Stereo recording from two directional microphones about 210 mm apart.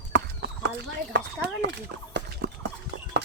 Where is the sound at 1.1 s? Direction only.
55° right (ahead or behind).